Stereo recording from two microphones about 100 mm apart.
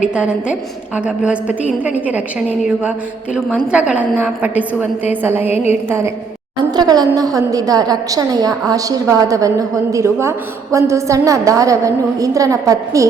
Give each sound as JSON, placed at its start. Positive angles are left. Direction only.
{"t": 0.1, "sound": "a woman's voice", "side_deg": -10}
{"t": 5.2, "sound": "music", "side_deg": -20}
{"t": 6.7, "sound": "a woman's voice", "side_deg": -40}